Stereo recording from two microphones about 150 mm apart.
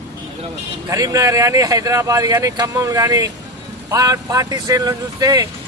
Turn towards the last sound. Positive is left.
turn(degrees=-25)  # may be behind; listen again after turning